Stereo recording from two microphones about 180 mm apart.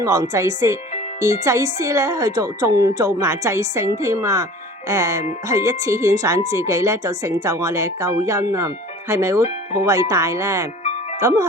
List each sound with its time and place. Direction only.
0.0 s a woman's voice: 20° right (ahead or behind)